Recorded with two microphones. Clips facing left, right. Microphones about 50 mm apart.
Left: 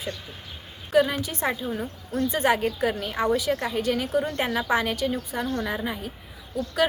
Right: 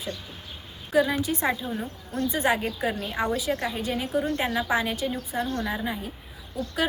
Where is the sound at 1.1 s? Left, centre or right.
Left.